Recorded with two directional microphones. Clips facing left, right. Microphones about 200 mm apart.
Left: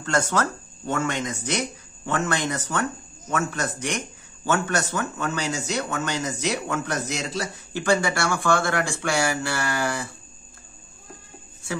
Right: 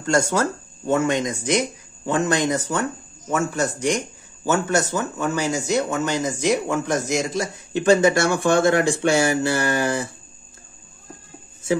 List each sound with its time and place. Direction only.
0.0 s a man's voice: 10° right (ahead or behind)